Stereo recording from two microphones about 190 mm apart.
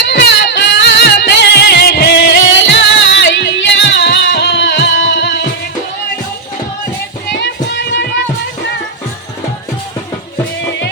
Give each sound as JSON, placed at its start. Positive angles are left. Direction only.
{"t": 0.0, "sound": "music", "side_deg": 70}
{"t": 7.3, "sound": "music", "side_deg": 65}